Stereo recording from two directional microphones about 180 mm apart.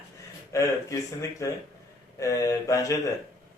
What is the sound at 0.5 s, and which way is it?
Speech, 15° left (ahead or behind).